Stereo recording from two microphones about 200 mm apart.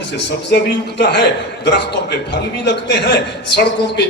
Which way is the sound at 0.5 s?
60° left (ahead or behind).